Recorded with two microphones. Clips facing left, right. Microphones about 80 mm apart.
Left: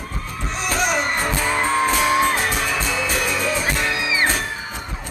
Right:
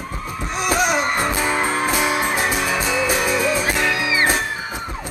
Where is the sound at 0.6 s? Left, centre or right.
Centre.